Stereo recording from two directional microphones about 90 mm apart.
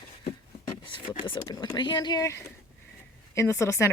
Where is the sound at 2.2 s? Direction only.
35° left (ahead or behind).